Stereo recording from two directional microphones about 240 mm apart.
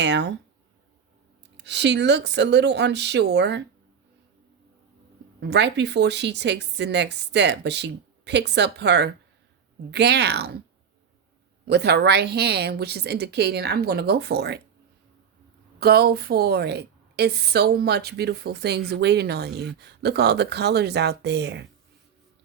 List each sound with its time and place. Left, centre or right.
0.0 s a woman's voice: right
1.6 s a woman's voice: right
5.4 s a woman's voice: right
11.6 s a woman's voice: right
15.8 s a woman's voice: right